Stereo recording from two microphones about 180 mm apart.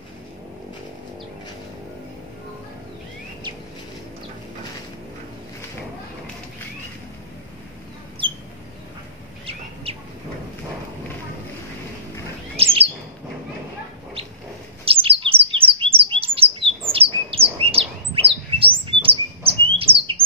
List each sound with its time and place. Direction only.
9.9 s bird: 35° right (ahead or behind)
12.5 s bird: 30° right (ahead or behind)
14.9 s chirp: 30° right (ahead or behind)
16.9 s bird: 30° right (ahead or behind)